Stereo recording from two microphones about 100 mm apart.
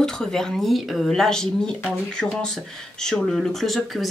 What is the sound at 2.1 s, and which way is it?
Speech, 5° left (ahead or behind).